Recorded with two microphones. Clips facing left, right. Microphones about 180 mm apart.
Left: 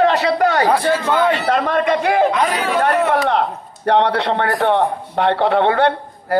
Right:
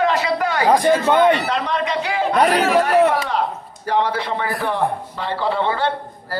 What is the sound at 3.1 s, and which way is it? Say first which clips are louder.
A man's voice: left 4 dB; 65° left (ahead or behind).